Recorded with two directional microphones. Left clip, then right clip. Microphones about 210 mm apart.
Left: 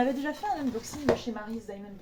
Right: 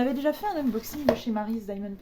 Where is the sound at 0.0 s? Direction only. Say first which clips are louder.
Right 3 dB; 50° right (ahead or behind).